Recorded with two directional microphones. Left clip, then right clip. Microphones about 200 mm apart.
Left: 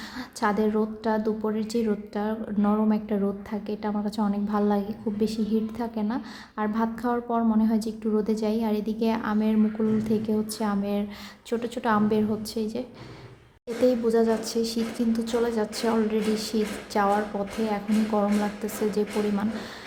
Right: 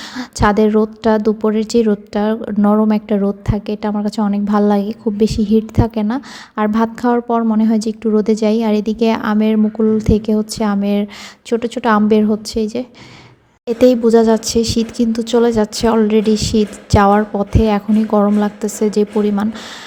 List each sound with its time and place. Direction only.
0.2 s a woman's voice: 40° right (ahead or behind)
13.8 s a woman's voice: 40° right (ahead or behind)